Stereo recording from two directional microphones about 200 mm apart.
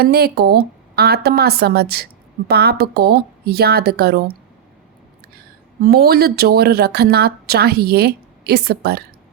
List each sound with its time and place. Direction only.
0.0 s a woman's voice: 50° right (ahead or behind)
5.8 s a woman's voice: 50° right (ahead or behind)